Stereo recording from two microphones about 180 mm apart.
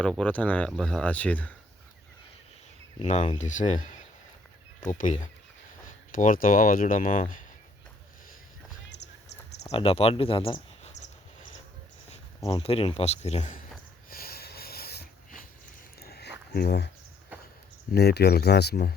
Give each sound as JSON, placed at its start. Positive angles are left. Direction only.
{"t": 0.0, "sound": "speech", "side_deg": 5}
{"t": 3.1, "sound": "speech", "side_deg": 40}
{"t": 8.9, "sound": "a sound", "side_deg": 70}
{"t": 9.6, "sound": "speech", "side_deg": 30}
{"t": 12.5, "sound": "speech", "side_deg": 30}
{"t": 14.1, "sound": "snort", "side_deg": 55}
{"t": 16.0, "sound": "a sound", "side_deg": 60}
{"t": 16.5, "sound": "speech", "side_deg": 65}
{"t": 17.9, "sound": "speech", "side_deg": 65}